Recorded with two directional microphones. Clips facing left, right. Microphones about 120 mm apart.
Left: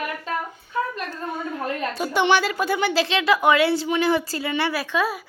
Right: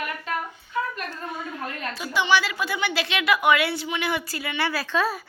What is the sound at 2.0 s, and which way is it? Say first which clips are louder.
A woman's voice: left 3 dB; 50° left (ahead or behind).